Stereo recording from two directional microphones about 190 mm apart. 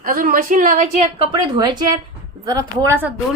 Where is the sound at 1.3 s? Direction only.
20° right (ahead or behind).